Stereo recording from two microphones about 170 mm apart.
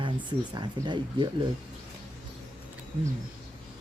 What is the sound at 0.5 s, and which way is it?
Speech, 25° right (ahead or behind).